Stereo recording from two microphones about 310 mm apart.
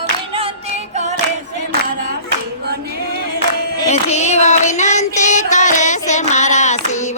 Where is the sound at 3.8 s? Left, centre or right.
Left.